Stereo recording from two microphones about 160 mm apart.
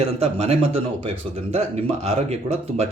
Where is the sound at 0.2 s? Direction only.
40° right (ahead or behind).